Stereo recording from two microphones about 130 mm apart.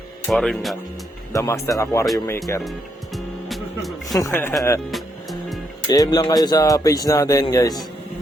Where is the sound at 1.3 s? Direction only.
25° left (ahead or behind).